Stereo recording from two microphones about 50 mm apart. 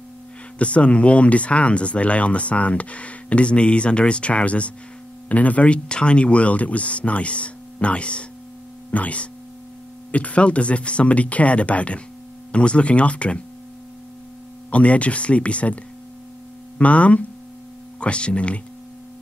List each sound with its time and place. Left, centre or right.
0.6 s speech: left
14.7 s speech: left